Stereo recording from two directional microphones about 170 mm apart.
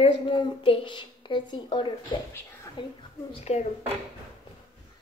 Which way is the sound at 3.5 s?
40° left (ahead or behind).